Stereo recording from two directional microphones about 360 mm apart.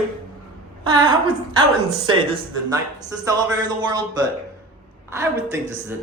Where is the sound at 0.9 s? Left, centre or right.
Centre.